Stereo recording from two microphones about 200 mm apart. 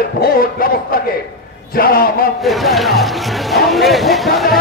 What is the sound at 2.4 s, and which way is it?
Speech, centre (ahead or behind).